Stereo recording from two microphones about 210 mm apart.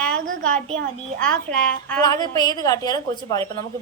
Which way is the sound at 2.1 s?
20° left (ahead or behind).